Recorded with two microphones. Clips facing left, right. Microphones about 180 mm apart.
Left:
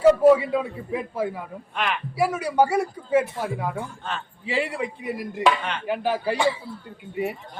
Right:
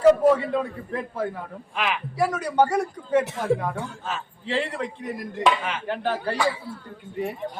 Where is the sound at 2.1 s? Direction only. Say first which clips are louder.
Left 1 dB; 10° left (ahead or behind).